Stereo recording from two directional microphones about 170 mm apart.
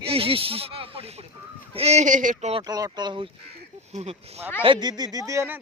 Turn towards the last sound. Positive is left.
turn(degrees=-15)  # may be behind; listen again after turning